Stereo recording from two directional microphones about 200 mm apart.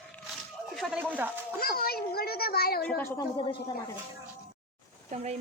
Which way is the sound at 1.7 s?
50° left (ahead or behind).